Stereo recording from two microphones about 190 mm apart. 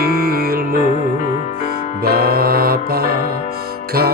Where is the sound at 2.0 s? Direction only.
55° right (ahead or behind).